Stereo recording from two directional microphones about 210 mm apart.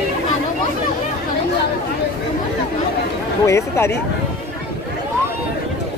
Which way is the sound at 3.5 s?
10° left (ahead or behind).